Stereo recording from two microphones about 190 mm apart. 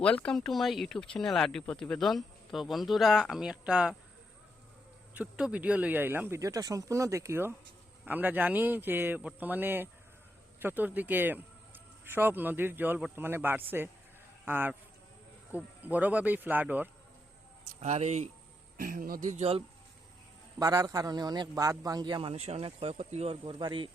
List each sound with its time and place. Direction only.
0.0 s speech: 5° left (ahead or behind)
5.1 s speech: 5° right (ahead or behind)
17.7 s speech: 35° right (ahead or behind)
18.8 s speech: 45° right (ahead or behind); by 19.6 s 30° right (ahead or behind)
20.6 s a man's voice: 20° right (ahead or behind)